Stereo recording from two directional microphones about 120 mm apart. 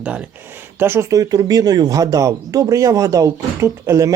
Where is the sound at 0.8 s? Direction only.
20° right (ahead or behind).